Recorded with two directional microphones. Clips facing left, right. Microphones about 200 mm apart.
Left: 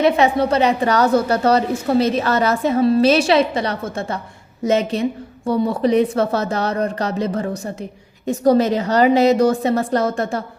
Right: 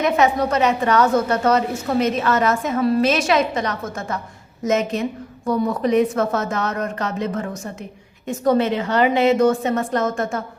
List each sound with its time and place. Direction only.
0.0 s a woman's voice: 30° left (ahead or behind)